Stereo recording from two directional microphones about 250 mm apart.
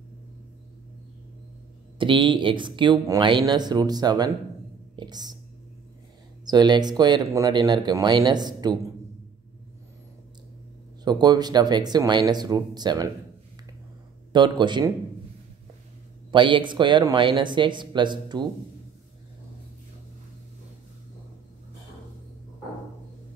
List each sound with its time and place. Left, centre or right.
2.0 s speech: centre
6.4 s speech: centre
11.1 s speech: centre
14.3 s speech: centre
16.3 s speech: centre